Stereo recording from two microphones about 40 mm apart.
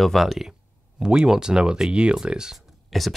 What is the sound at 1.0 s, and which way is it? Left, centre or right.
Speech, centre.